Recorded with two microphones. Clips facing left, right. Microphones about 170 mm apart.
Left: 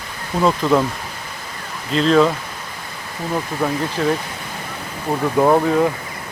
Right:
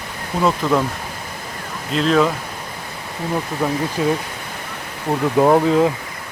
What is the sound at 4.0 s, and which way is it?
Speech, 10° right (ahead or behind).